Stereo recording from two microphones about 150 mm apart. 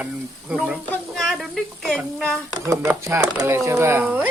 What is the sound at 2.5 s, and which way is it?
Speech, 20° right (ahead or behind).